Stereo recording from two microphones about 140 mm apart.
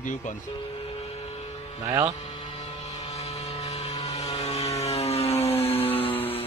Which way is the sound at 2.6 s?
50° left (ahead or behind).